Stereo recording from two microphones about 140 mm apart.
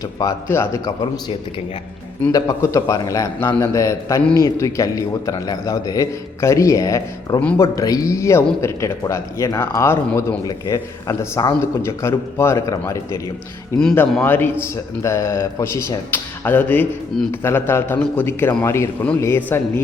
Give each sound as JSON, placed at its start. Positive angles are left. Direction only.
{"t": 0.2, "sound": "a man's voice", "side_deg": 20}
{"t": 2.3, "sound": "a man's voice", "side_deg": 25}
{"t": 13.7, "sound": "a man's voice", "side_deg": 10}